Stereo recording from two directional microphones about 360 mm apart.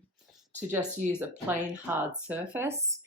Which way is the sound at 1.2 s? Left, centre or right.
Centre.